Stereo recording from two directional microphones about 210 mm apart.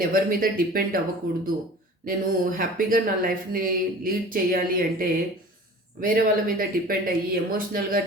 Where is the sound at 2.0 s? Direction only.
40° right (ahead or behind).